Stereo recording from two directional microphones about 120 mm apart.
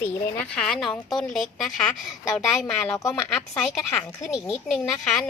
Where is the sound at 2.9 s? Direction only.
30° left (ahead or behind).